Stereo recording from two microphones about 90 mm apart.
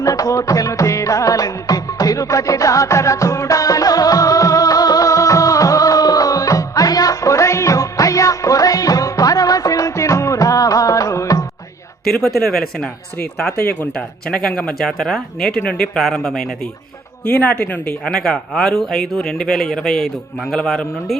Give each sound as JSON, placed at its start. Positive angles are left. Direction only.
{"t": 0.0, "sound": "music", "side_deg": 40}
{"t": 12.1, "sound": "speech", "side_deg": 5}
{"t": 13.1, "sound": "speech", "side_deg": 15}
{"t": 17.2, "sound": "speech", "side_deg": 15}